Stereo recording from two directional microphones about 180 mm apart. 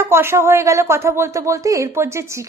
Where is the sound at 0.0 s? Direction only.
15° right (ahead or behind).